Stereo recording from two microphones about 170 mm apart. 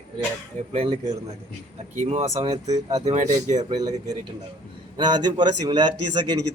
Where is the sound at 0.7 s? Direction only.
35° right (ahead or behind).